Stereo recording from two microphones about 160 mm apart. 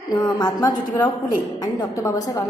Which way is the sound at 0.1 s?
25° left (ahead or behind).